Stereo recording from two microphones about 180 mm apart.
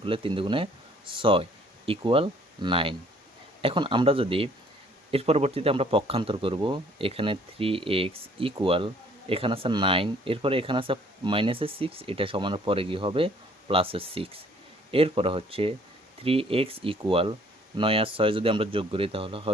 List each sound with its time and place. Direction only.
0.0 s speech: 30° right (ahead or behind)